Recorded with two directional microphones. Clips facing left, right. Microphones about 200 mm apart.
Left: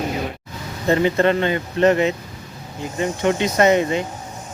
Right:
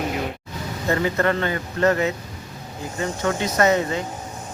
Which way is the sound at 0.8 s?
20° left (ahead or behind).